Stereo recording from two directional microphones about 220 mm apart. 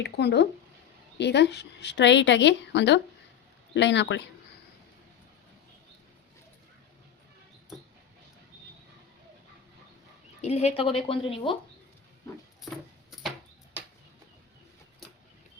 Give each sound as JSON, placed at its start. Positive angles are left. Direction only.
{"t": 0.0, "sound": "a woman's voice", "side_deg": 50}
{"t": 10.4, "sound": "speech", "side_deg": 30}